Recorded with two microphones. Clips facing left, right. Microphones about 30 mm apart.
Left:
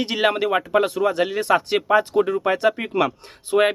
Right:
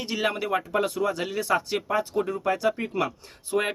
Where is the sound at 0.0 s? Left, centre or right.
Left.